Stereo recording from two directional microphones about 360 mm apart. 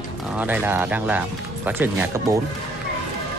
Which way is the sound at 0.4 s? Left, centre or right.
Centre.